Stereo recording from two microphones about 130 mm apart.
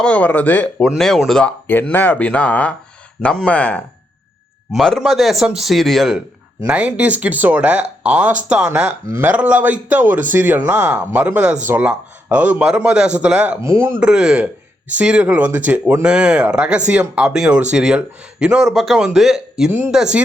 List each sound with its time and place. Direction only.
0.0 s speech: 10° left (ahead or behind)
0.8 s speech: centre (ahead or behind)
13.7 s speech: 20° right (ahead or behind)
14.0 s speech: 5° right (ahead or behind)